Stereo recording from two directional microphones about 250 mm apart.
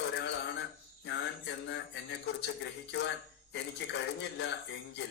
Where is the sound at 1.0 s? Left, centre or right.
Left.